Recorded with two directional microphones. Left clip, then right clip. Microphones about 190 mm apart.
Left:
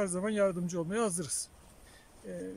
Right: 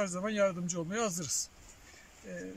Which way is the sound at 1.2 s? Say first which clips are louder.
Right 4 dB; 25° left (ahead or behind).